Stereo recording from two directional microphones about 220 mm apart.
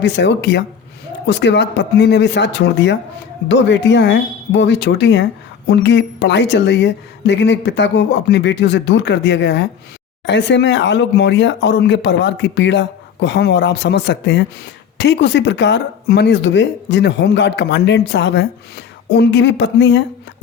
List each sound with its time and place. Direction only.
0.0 s speech: 50° left (ahead or behind)